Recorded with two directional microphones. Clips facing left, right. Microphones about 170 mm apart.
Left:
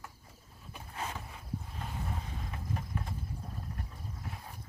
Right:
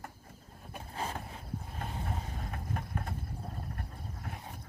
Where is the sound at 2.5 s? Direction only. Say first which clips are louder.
Even; 50° right (ahead or behind).